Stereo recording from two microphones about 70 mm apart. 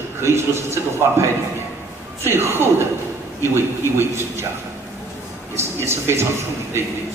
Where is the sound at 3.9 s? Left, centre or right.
Right.